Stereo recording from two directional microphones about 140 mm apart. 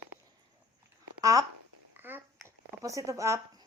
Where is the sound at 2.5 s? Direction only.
20° right (ahead or behind).